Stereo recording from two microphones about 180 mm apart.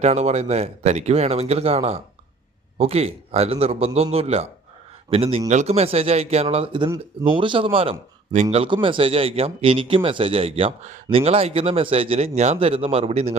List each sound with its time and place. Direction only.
0.0 s a man's voice: 40° right (ahead or behind)